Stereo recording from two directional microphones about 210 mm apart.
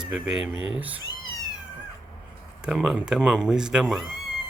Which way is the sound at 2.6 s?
5° right (ahead or behind).